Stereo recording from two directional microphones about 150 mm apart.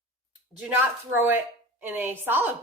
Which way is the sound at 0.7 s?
15° right (ahead or behind).